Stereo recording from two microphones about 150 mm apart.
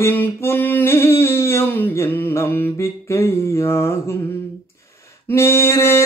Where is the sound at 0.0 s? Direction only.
15° left (ahead or behind).